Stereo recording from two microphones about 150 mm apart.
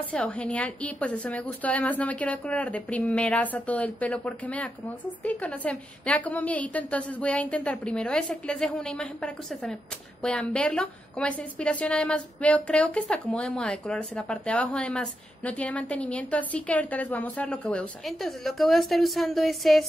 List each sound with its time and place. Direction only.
0.1 s a woman's voice: 5° left (ahead or behind)